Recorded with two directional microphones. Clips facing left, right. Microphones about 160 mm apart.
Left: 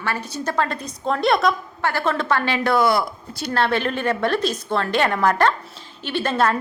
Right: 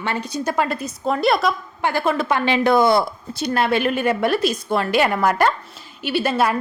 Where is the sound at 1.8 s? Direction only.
15° right (ahead or behind).